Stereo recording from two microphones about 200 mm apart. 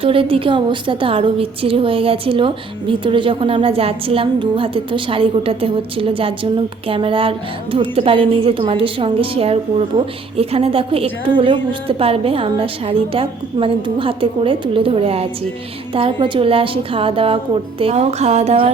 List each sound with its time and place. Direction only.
0.0 s a woman's voice: 25° right (ahead or behind)